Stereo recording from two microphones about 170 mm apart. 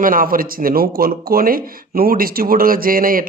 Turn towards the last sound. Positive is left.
turn(degrees=-55)  # may be behind; listen again after turning